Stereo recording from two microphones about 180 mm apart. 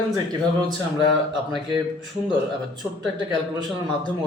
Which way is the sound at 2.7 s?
25° right (ahead or behind).